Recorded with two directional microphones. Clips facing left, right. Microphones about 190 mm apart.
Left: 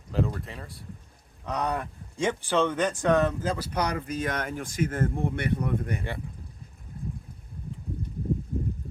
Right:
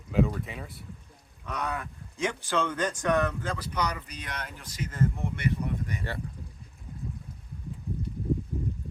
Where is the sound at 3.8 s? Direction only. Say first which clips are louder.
Left 5 dB; 50° left (ahead or behind).